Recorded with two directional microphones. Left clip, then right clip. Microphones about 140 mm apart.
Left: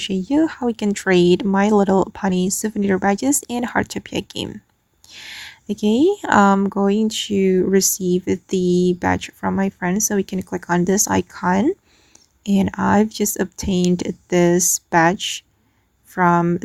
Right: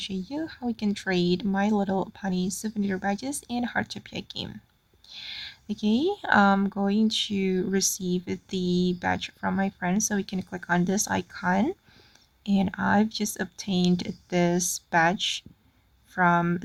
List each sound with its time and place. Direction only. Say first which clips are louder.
0.1 s speech: left 15 dB; 65° left (ahead or behind); by 16.4 s 45° left (ahead or behind)